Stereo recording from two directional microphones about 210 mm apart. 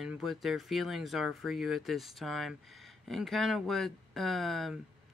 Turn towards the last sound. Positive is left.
turn(degrees=0)  # may be behind; listen again after turning